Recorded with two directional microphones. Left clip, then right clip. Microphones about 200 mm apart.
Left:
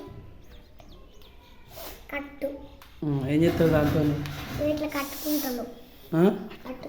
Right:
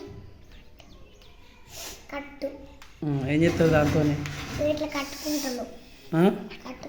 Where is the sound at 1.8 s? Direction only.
50° left (ahead or behind).